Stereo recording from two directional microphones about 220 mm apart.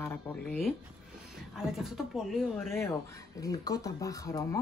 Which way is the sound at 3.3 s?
15° left (ahead or behind).